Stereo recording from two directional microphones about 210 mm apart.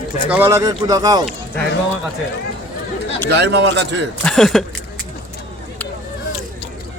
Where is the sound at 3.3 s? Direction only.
55° right (ahead or behind).